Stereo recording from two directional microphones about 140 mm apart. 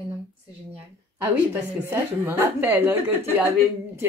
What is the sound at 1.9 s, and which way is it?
Speech, 15° right (ahead or behind).